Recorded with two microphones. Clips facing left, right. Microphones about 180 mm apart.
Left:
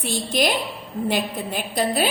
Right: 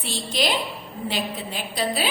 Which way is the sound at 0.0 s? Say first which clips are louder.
Left 4 dB; 50° left (ahead or behind).